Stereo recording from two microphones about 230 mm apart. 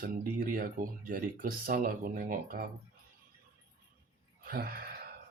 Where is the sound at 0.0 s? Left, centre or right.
Right.